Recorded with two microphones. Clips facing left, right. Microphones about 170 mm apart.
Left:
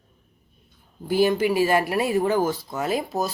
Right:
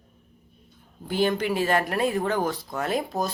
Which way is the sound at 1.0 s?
5° left (ahead or behind).